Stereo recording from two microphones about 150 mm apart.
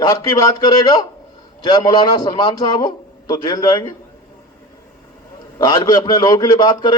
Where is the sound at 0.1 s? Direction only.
25° left (ahead or behind).